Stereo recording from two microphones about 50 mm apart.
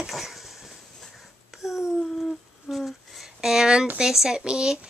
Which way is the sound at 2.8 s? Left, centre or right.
Centre.